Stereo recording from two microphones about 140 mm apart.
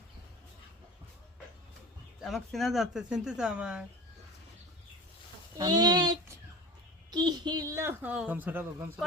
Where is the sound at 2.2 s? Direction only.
Centre (ahead or behind).